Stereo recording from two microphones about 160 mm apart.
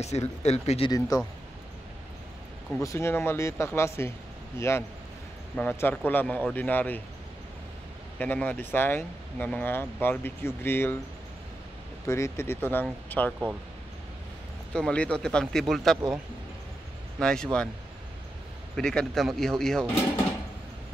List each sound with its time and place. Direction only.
0.0 s speech: 45° left (ahead or behind)
0.9 s speech: 20° left (ahead or behind)
2.8 s speech: 20° left (ahead or behind)
8.2 s speech: 10° left (ahead or behind)
12.1 s speech: 15° left (ahead or behind)
14.7 s speech: 5° left (ahead or behind)
17.2 s speech: 5° left (ahead or behind)
18.8 s speech: 5° left (ahead or behind)